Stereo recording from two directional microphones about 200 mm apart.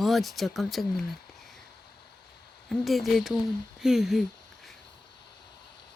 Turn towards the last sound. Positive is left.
turn(degrees=0)  # may be behind; listen again after turning